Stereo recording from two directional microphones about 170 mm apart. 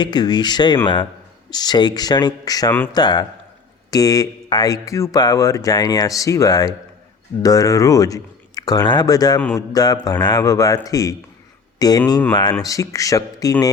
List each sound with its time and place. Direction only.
0.0 s speech: 25° left (ahead or behind)